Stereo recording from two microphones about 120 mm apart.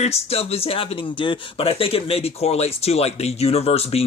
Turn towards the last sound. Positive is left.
turn(degrees=55)  # may be behind; listen again after turning